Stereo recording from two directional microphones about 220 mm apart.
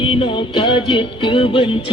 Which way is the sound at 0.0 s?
25° left (ahead or behind).